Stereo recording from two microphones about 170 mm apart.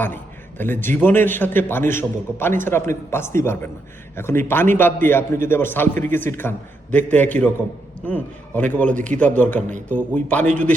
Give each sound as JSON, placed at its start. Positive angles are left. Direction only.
{"t": 0.6, "sound": "a man's voice", "side_deg": 10}
{"t": 9.6, "sound": "speech", "side_deg": -45}
{"t": 10.2, "sound": "a man's voice", "side_deg": 10}